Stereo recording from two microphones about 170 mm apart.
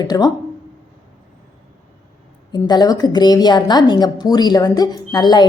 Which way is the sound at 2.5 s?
25° left (ahead or behind).